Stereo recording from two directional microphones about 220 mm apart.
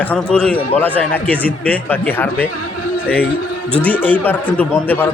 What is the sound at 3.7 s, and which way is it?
A man's voice, 5° left (ahead or behind).